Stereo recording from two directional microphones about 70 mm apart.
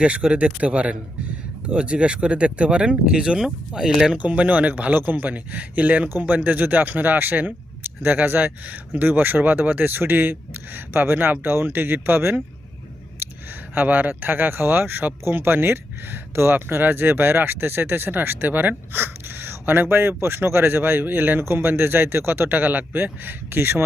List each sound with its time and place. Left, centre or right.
0.0 s speech: centre
4.2 s a man's voice: centre
13.2 s a sound: right
13.7 s a man's voice: right